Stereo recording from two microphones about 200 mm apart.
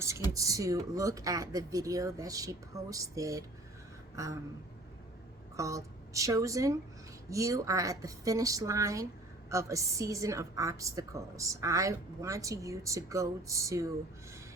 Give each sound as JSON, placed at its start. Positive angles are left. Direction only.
{"t": 0.3, "sound": "a woman's voice", "side_deg": -15}
{"t": 4.1, "sound": "a sound", "side_deg": -15}
{"t": 5.5, "sound": "a woman's voice", "side_deg": -15}